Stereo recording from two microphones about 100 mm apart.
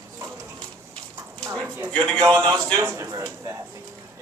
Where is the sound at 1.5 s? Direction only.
25° right (ahead or behind).